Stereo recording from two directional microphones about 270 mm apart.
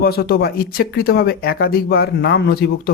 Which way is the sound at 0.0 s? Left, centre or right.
Left.